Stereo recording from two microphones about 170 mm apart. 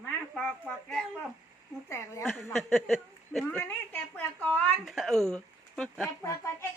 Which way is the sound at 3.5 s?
10° left (ahead or behind).